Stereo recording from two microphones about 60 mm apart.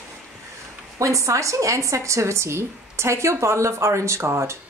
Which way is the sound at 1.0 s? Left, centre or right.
Right.